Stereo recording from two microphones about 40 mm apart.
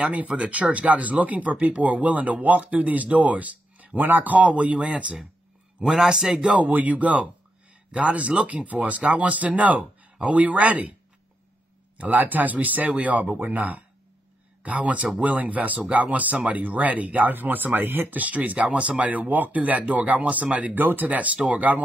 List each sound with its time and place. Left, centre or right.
0.0 s speech: right
5.9 s a man's voice: centre
6.7 s speech: right
12.0 s speech: right
18.1 s speech: right
20.7 s speech: right